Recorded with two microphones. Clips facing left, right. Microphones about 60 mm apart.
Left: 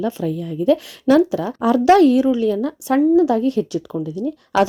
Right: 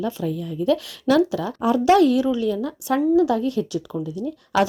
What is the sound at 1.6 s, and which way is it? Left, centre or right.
Speech, left.